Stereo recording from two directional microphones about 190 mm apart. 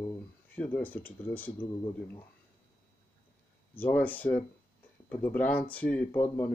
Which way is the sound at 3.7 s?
10° left (ahead or behind).